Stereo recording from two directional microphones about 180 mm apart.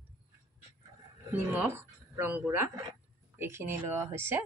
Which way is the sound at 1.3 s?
10° right (ahead or behind).